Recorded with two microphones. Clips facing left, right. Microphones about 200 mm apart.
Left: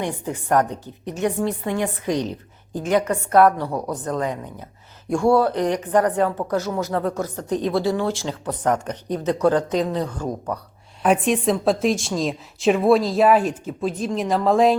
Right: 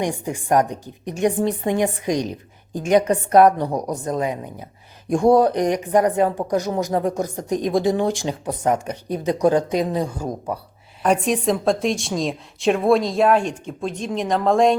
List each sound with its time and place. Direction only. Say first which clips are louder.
0.0 s a woman's voice: right 2 dB; 15° right (ahead or behind)
11.0 s a woman's voice: even; centre (ahead or behind)